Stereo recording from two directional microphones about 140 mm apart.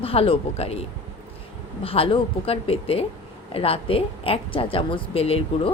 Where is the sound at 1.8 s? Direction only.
40° left (ahead or behind).